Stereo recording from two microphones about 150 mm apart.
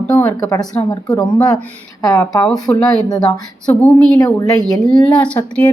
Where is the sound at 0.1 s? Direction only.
20° left (ahead or behind).